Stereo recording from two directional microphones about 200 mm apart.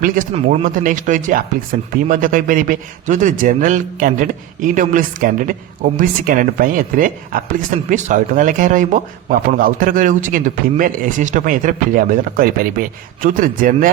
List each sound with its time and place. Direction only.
0.3 s a man's voice: 35° right (ahead or behind)